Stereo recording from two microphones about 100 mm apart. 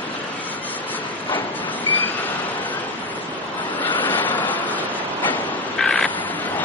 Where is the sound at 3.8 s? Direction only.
15° left (ahead or behind).